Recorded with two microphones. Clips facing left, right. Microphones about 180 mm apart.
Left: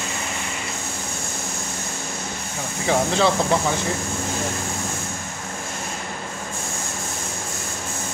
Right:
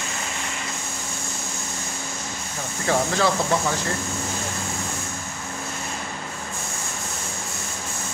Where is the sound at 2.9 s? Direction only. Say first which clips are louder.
Left 2 dB; 20° left (ahead or behind).